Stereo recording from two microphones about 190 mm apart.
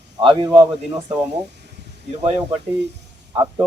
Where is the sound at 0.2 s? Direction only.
25° right (ahead or behind).